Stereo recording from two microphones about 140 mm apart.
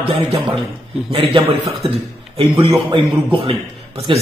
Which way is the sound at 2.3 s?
35° right (ahead or behind).